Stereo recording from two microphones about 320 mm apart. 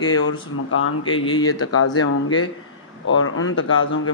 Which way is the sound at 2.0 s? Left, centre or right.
Left.